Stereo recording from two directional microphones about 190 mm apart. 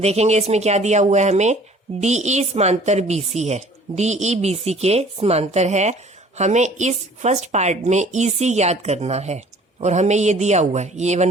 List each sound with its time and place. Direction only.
0.0 s a woman's voice: 35° right (ahead or behind)